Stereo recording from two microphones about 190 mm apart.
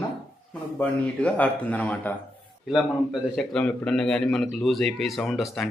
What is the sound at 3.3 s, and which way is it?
A man's voice, 5° left (ahead or behind).